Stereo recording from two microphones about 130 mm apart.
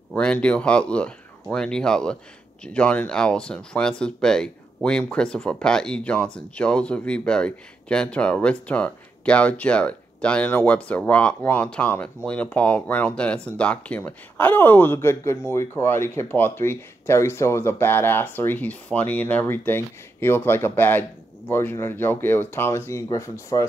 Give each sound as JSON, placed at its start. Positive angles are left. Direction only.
{"t": 0.1, "sound": "speech", "side_deg": 10}